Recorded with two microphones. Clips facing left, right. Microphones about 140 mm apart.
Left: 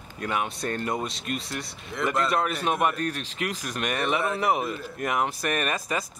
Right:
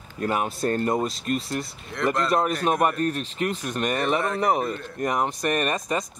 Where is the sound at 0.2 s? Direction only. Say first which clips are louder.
Right 4 dB; 40° right (ahead or behind).